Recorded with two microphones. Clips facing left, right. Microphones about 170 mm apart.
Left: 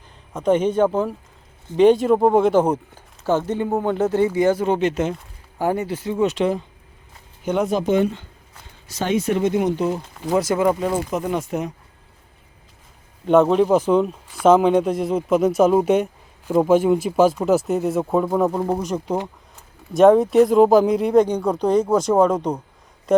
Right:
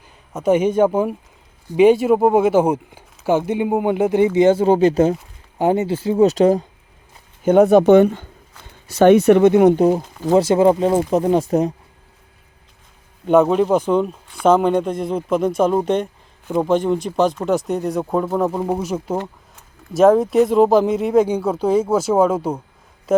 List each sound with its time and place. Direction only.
0.3 s speech: 10° right (ahead or behind)
4.4 s speech: 25° right (ahead or behind)
5.5 s speech: 20° right (ahead or behind); by 6.7 s 40° right (ahead or behind)
7.4 s speech: 55° right (ahead or behind)
10.2 s speech: 30° right (ahead or behind)
13.2 s speech: centre (ahead or behind)